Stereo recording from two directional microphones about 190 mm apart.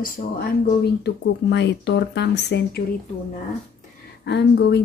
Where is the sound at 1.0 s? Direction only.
65° left (ahead or behind).